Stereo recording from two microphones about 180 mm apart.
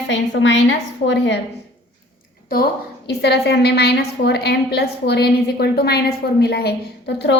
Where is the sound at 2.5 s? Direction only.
65° left (ahead or behind).